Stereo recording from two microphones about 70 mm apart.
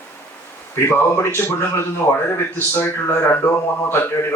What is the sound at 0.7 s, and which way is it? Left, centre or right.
Speech, left.